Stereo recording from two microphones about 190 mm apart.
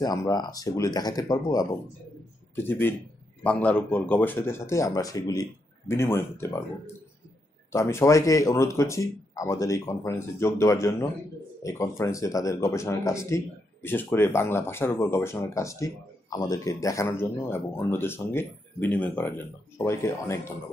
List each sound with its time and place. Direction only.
0.0 s speech: 20° left (ahead or behind)
7.7 s speech: 15° left (ahead or behind)